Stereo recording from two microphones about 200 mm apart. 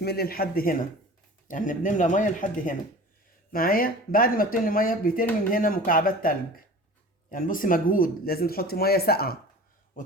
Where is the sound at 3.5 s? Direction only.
45° left (ahead or behind).